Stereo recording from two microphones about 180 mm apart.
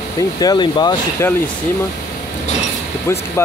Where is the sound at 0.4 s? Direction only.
25° left (ahead or behind).